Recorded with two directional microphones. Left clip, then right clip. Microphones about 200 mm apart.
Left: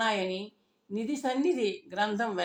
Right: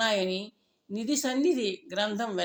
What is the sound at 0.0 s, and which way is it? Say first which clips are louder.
A woman's voice: right 2 dB; 40° right (ahead or behind).